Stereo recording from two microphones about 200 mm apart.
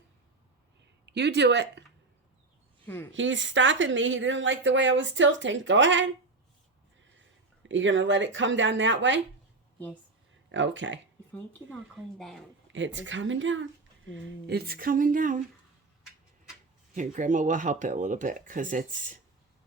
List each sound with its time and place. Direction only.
1.0 s speech: 60° right (ahead or behind)
2.8 s speech: 10° left (ahead or behind)
3.1 s speech: 70° right (ahead or behind)
7.6 s speech: 70° right (ahead or behind)
10.5 s speech: 65° right (ahead or behind)
11.3 s speech: 5° left (ahead or behind)
12.7 s speech: 65° right (ahead or behind)
14.4 s speech: 50° right (ahead or behind)
16.9 s speech: 40° right (ahead or behind)